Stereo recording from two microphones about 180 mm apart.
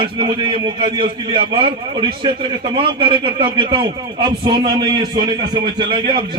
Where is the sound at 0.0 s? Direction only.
30° right (ahead or behind).